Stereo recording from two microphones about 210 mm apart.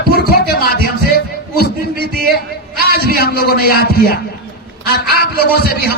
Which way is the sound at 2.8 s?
45° left (ahead or behind).